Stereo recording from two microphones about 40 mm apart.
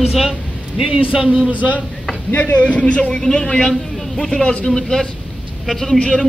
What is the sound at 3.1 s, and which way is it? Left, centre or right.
Speech, centre.